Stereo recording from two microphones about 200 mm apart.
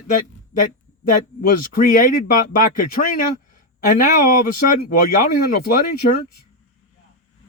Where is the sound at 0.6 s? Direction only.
45° left (ahead or behind).